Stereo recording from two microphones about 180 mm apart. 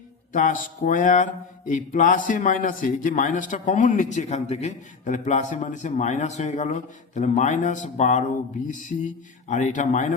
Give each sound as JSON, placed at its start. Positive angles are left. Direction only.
{"t": 0.3, "sound": "mantra", "side_deg": 45}